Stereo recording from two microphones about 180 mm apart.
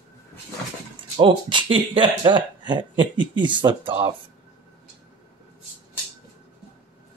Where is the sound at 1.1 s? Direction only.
25° right (ahead or behind).